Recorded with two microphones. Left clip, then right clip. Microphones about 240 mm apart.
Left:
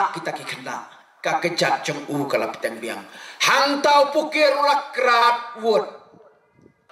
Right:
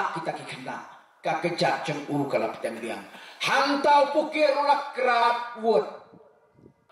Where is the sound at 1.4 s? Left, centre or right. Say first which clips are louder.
Left 3 dB; centre.